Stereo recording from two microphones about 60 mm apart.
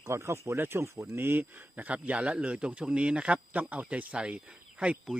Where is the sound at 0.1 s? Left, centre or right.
Right.